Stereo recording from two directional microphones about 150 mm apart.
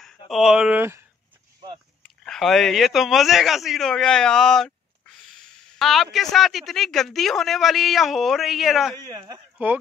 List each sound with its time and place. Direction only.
0.0 s speech: centre (ahead or behind)
2.2 s speech: 5° left (ahead or behind)
9.0 s speech: 25° right (ahead or behind)
9.6 s speech: 10° right (ahead or behind)